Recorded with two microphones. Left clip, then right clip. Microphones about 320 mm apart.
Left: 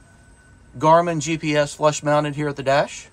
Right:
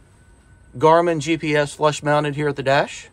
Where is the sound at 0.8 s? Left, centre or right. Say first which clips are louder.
Right 1 dB; right.